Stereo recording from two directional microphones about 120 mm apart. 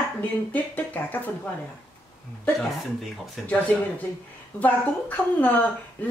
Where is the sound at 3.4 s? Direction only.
15° left (ahead or behind).